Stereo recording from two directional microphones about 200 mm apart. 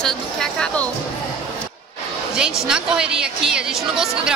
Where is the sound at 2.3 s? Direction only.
5° right (ahead or behind).